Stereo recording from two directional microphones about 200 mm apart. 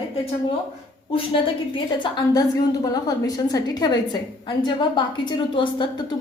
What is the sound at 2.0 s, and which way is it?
A woman's voice, 20° left (ahead or behind).